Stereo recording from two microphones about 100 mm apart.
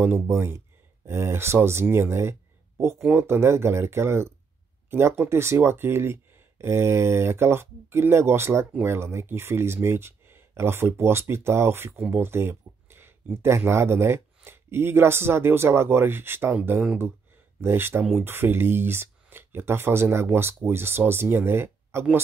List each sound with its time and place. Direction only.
0.0 s speech: 20° right (ahead or behind)
12.1 s a sound: 25° right (ahead or behind)
13.4 s speech: 25° right (ahead or behind)